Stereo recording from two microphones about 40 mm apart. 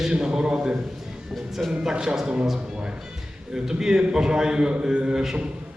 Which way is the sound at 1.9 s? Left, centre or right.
Centre.